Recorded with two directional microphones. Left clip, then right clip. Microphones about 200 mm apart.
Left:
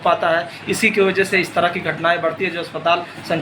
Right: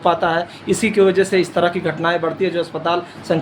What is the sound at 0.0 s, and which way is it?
Speech, 60° right (ahead or behind).